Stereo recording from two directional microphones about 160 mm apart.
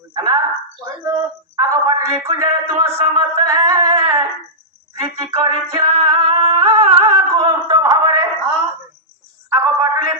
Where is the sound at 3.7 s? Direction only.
30° right (ahead or behind).